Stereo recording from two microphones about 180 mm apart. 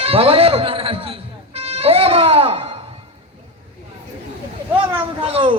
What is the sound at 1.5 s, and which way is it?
Music, 35° right (ahead or behind).